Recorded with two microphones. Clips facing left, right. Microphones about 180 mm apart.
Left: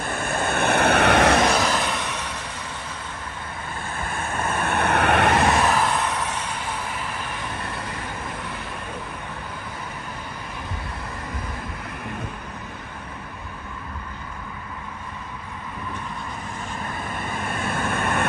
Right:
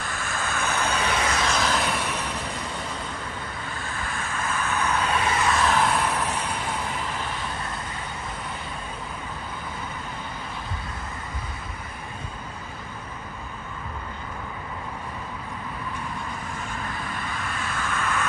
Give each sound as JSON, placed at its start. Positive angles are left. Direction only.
{"t": 0.0, "sound": "vehicle", "side_deg": 55}
{"t": 1.7, "sound": "vehicle", "side_deg": 0}
{"t": 4.0, "sound": "vehicle", "side_deg": 55}
{"t": 5.8, "sound": "vehicle", "side_deg": -5}
{"t": 17.3, "sound": "vehicle", "side_deg": 55}